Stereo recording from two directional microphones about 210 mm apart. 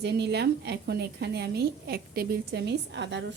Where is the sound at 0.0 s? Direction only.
50° right (ahead or behind).